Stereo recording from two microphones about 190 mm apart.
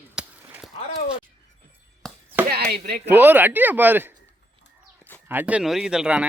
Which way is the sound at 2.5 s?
55° right (ahead or behind).